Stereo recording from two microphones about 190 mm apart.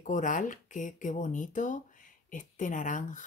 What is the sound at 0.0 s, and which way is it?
Speech, 40° left (ahead or behind).